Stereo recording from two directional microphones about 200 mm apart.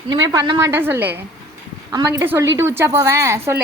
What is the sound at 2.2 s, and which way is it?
A woman's voice, 10° right (ahead or behind).